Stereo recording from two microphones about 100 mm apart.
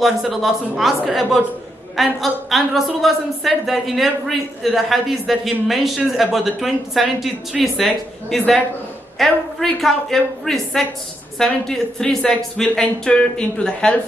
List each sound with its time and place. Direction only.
0.0 s speech: centre (ahead or behind)